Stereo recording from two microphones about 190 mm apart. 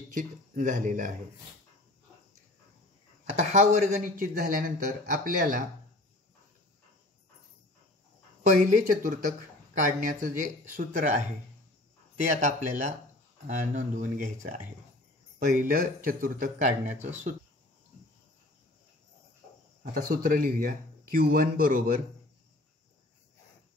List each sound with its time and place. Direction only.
0.1 s speech: 45° right (ahead or behind)
3.3 s speech: 45° right (ahead or behind)
8.5 s speech: 40° right (ahead or behind)
12.4 s speech: 40° right (ahead or behind)
19.8 s speech: 50° right (ahead or behind)